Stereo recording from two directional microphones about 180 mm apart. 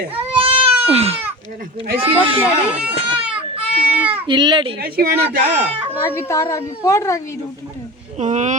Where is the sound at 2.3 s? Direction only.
5° right (ahead or behind).